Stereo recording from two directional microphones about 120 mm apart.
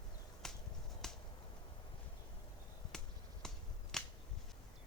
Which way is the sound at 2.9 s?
5° left (ahead or behind).